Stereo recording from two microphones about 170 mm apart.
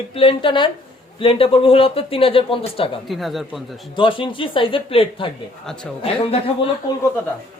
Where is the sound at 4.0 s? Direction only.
30° left (ahead or behind).